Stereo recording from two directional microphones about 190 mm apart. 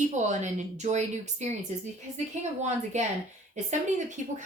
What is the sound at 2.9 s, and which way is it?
Speech, 40° right (ahead or behind).